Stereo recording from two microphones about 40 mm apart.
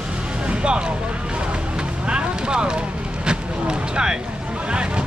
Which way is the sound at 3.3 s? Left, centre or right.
Right.